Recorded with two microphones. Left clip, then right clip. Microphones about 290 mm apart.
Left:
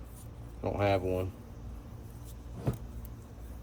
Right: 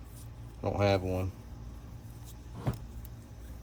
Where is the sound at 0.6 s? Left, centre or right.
Centre.